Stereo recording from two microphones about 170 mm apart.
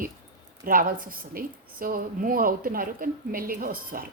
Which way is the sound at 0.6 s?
55° right (ahead or behind).